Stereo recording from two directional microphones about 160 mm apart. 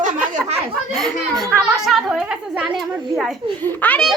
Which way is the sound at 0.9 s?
Centre (ahead or behind).